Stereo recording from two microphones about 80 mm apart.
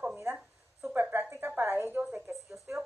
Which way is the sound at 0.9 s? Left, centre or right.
Right.